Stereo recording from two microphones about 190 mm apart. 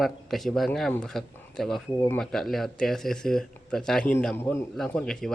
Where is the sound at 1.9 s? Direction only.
15° left (ahead or behind).